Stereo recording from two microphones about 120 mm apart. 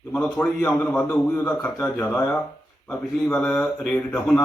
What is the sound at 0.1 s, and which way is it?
Speech, 10° left (ahead or behind).